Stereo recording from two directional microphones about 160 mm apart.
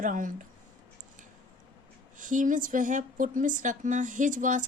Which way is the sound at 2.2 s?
55° right (ahead or behind).